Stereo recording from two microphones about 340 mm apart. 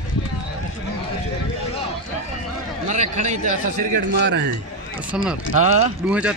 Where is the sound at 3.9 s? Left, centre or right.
Right.